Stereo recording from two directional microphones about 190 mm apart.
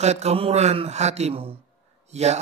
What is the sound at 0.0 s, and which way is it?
Speech, 35° right (ahead or behind).